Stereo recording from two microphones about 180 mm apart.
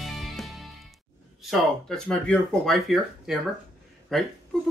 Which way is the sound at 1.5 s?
5° left (ahead or behind).